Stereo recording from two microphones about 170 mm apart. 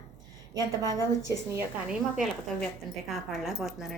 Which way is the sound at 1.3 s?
10° right (ahead or behind).